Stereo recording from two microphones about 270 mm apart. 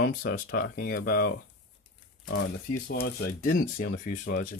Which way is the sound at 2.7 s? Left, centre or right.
Left.